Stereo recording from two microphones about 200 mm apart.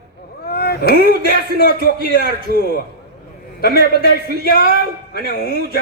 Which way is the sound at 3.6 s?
50° left (ahead or behind).